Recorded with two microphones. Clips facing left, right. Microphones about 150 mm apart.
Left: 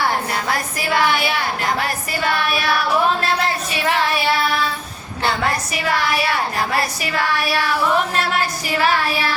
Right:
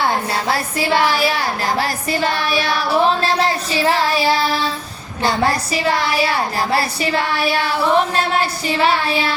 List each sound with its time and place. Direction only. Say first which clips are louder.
0.4 s speech: right 3 dB; 30° right (ahead or behind)
1.8 s female singing: right 3 dB; 30° right (ahead or behind)
5.2 s speech: right 3 dB; 30° right (ahead or behind)